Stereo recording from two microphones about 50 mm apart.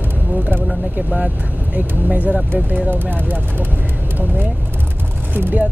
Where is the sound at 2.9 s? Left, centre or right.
Right.